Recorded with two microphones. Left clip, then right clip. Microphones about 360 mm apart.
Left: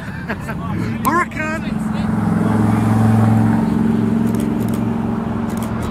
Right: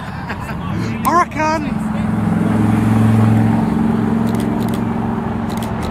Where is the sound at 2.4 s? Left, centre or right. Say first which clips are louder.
Right 1 dB; centre.